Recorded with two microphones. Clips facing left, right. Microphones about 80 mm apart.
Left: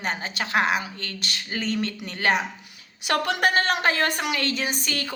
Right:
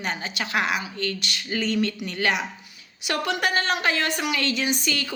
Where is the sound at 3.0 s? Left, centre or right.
Left.